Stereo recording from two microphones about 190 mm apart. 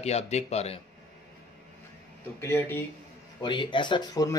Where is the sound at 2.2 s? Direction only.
10° left (ahead or behind).